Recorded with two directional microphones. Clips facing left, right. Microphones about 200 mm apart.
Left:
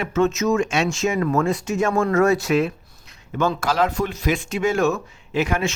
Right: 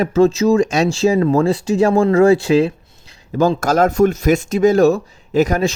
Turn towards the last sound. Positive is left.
turn(degrees=-40)  # may be behind; listen again after turning